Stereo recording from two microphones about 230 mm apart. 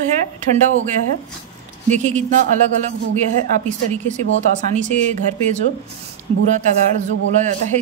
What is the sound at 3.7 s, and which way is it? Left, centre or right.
A man's voice, right.